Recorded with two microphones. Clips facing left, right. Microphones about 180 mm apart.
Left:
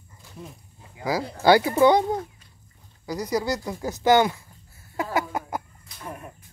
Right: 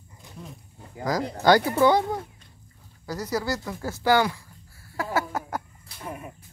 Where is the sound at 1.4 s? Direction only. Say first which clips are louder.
Left 2 dB; 10° left (ahead or behind).